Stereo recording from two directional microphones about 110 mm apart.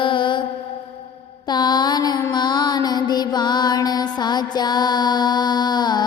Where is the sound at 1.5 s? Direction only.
40° left (ahead or behind).